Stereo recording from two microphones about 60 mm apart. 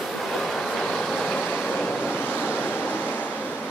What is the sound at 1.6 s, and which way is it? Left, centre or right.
Waves, centre.